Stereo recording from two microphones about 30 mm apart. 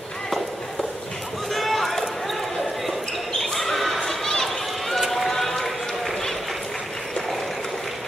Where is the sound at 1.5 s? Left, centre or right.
Centre.